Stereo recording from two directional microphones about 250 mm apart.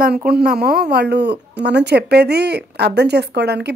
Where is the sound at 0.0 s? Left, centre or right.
Right.